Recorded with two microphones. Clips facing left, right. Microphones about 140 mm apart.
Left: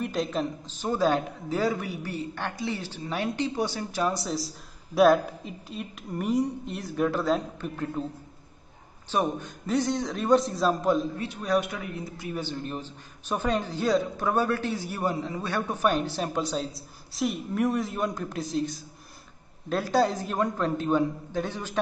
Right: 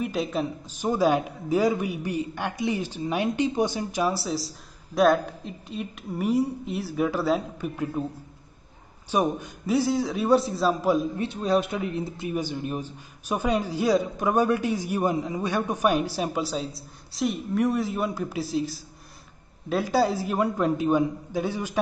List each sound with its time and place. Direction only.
0.0 s a man's voice: 5° right (ahead or behind)
9.1 s a woman's voice: 10° right (ahead or behind)
11.1 s speech: 25° right (ahead or behind)
12.4 s a man's voice: 10° right (ahead or behind)